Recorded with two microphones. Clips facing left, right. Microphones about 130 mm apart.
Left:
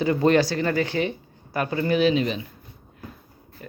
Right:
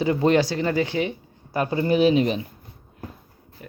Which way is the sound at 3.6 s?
10° right (ahead or behind).